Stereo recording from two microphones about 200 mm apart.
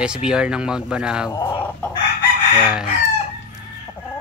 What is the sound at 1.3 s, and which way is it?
Chicken, 15° left (ahead or behind).